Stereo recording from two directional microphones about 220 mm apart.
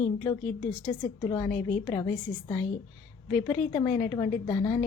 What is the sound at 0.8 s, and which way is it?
A woman's voice, 25° left (ahead or behind).